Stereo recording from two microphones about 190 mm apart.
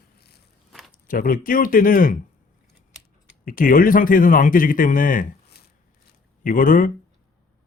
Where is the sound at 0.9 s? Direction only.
50° left (ahead or behind).